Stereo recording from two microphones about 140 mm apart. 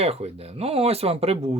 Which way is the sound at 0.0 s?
45° right (ahead or behind).